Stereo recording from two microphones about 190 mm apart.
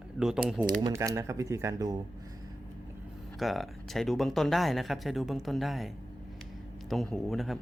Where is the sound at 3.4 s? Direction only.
Centre (ahead or behind).